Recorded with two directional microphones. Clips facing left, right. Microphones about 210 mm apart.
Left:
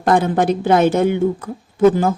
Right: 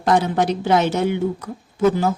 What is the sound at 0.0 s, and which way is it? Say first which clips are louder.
A woman's voice: left 3 dB; 55° left (ahead or behind).